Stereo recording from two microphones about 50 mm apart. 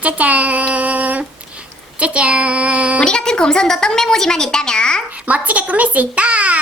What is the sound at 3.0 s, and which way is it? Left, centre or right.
A woman's voice, centre.